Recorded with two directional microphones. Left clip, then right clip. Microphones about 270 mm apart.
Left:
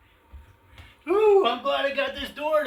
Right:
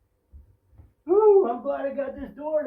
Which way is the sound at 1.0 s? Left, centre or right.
Left.